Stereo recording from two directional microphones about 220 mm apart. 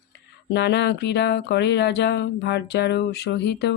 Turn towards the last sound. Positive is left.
turn(degrees=50)  # may be behind; listen again after turning